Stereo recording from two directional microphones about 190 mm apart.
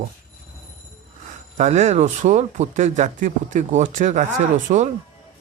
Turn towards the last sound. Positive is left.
turn(degrees=-40)  # may be behind; listen again after turning